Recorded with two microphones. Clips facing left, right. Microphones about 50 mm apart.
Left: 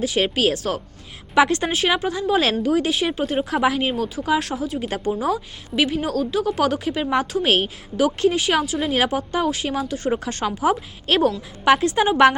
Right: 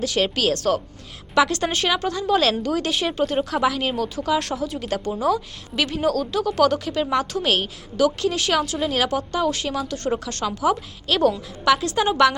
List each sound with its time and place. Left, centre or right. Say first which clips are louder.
0.0 s a woman's voice: left 2 dB; centre
1.6 s a woman's voice: left 1 dB; centre
3.5 s a woman's voice: left 2 dB; left; by 4.8 s centre
4.8 s a woman's voice: left 1 dB; centre
10.2 s a woman's voice: left 2 dB; left
11.1 s a woman's voice: left 1 dB; left